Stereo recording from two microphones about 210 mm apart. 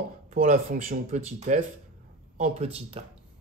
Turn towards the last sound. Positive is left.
turn(degrees=-25)  # may be behind; listen again after turning